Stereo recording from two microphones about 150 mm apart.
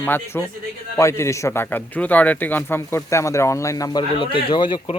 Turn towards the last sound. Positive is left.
turn(degrees=30)  # may be behind; listen again after turning